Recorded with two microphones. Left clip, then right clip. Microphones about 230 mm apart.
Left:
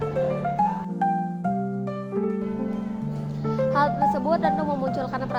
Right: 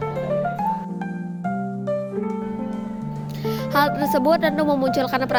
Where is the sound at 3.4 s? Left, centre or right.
Right.